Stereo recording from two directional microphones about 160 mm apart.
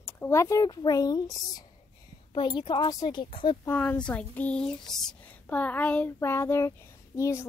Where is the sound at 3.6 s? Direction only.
10° left (ahead or behind).